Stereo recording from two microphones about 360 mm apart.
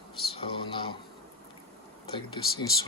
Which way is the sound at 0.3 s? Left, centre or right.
Centre.